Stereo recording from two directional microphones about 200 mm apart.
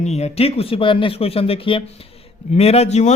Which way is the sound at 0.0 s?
35° left (ahead or behind).